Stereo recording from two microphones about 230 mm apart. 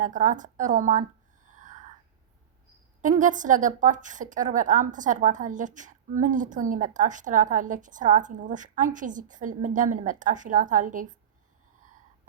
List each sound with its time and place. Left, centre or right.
0.0 s a woman's voice: right
1.5 s whispering: right
3.0 s a woman's voice: right